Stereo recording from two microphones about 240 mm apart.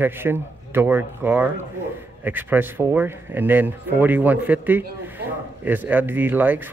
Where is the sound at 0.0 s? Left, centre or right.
Centre.